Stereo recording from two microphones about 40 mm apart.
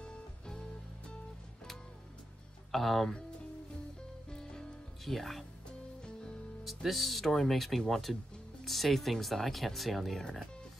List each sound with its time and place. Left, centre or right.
2.7 s speech: centre
4.3 s music: centre
5.0 s speech: centre
6.6 s speech: centre